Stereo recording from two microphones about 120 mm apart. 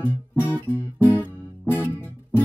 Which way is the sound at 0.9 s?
15° left (ahead or behind).